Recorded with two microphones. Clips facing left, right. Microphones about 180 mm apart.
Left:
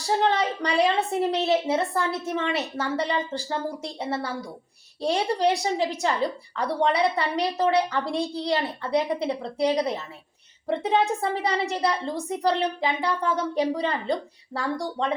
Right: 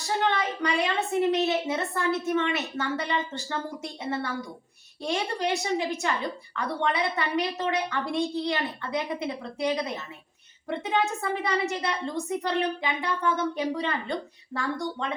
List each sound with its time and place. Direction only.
0.0 s a woman's voice: 35° left (ahead or behind)